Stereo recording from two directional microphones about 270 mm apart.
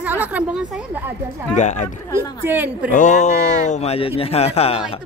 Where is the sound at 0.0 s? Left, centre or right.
Centre.